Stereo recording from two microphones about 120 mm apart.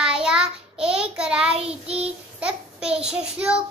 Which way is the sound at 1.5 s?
55° right (ahead or behind).